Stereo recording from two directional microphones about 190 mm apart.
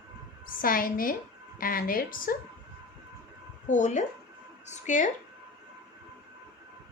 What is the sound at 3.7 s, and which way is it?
Speech, 40° left (ahead or behind).